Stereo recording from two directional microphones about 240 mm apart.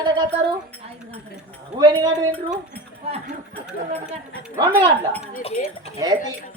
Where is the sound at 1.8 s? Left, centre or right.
Centre.